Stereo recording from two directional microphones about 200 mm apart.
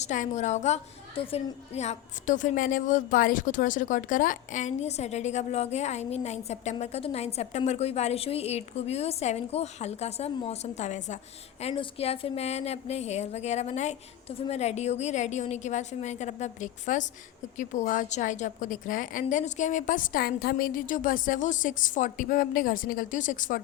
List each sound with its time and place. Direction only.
0.0 s a woman's voice: 35° left (ahead or behind)